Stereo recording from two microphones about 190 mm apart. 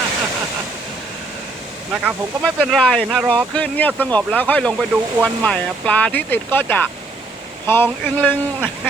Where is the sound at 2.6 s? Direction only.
Centre (ahead or behind).